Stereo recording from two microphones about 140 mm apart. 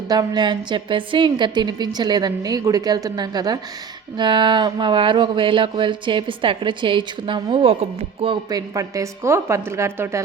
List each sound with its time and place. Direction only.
0.1 s a woman's voice: 30° right (ahead or behind)
8.4 s a woman's voice: 25° right (ahead or behind)